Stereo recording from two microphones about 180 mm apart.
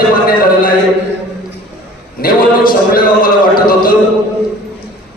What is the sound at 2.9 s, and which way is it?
A man's voice, 50° left (ahead or behind).